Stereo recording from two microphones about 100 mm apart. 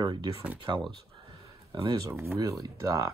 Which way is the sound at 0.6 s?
55° right (ahead or behind).